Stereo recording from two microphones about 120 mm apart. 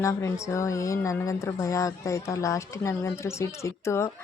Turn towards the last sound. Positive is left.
turn(degrees=25)  # may be behind; listen again after turning